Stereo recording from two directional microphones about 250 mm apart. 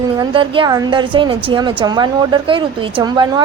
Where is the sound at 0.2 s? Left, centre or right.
Centre.